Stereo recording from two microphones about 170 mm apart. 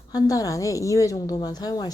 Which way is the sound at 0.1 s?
20° left (ahead or behind).